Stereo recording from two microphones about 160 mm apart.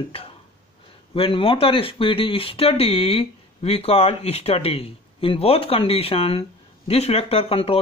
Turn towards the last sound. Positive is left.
turn(degrees=35)  # may be behind; listen again after turning